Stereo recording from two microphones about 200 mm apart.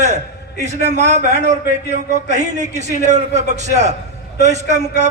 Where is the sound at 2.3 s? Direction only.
35° right (ahead or behind).